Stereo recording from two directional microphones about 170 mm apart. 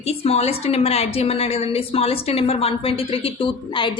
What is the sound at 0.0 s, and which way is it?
A woman's voice, 35° left (ahead or behind).